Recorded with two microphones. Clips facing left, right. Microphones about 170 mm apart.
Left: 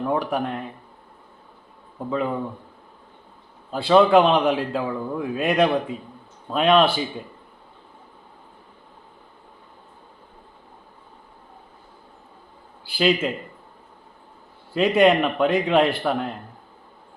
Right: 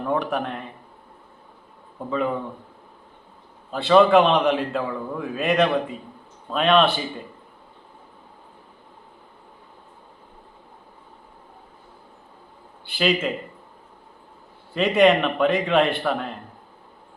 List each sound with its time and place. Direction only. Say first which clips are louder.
0.0 s a man's voice: left 1 dB; 5° left (ahead or behind)
2.0 s a man's voice: even; 5° left (ahead or behind)
3.7 s a man's voice: even; 5° left (ahead or behind)
12.9 s a man's voice: left 2 dB; 5° left (ahead or behind)
14.7 s a man's voice: even; 5° left (ahead or behind)